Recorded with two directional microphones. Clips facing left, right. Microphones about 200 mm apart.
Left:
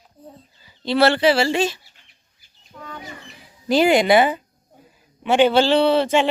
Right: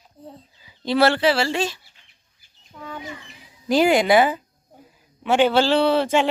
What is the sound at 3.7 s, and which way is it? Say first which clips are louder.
Speech: left 1 dB; 10° right (ahead or behind).